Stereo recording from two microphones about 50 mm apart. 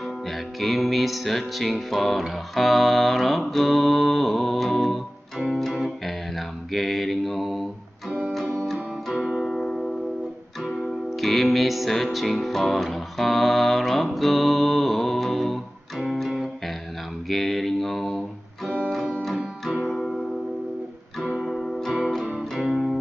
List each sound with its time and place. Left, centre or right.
0.6 s music: centre
8.1 s music: right
9.1 s music: centre
17.3 s mantra: centre
19.6 s music: centre
21.4 s music: centre